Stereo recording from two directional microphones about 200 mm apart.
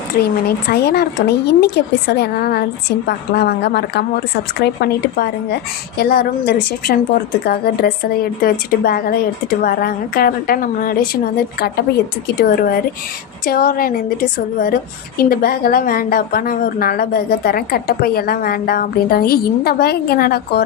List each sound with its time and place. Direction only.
0.2 s a woman's voice: 50° left (ahead or behind)
12.4 s a woman's voice: 45° left (ahead or behind)